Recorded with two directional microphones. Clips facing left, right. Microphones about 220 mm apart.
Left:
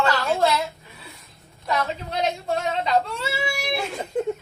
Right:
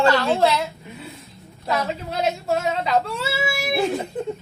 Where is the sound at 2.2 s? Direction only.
5° right (ahead or behind).